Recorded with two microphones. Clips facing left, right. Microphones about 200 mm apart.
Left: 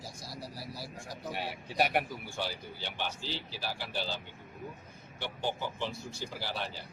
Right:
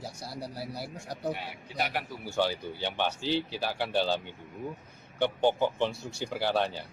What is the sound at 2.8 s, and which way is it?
Speech, 60° right (ahead or behind).